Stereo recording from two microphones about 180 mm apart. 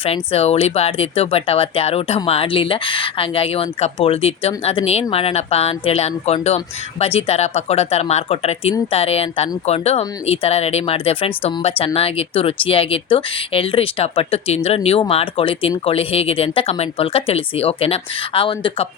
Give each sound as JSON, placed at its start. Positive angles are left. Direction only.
{"t": 0.0, "sound": "speech", "side_deg": 35}